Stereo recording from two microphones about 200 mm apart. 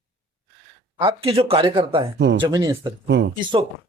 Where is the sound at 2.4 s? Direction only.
20° right (ahead or behind).